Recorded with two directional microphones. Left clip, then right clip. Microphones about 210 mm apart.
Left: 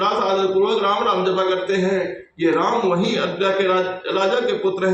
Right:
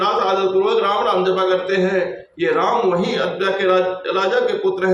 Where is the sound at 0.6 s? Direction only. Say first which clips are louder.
Right 1 dB; 20° right (ahead or behind).